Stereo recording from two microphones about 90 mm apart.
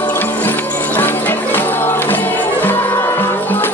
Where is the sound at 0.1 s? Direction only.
20° left (ahead or behind).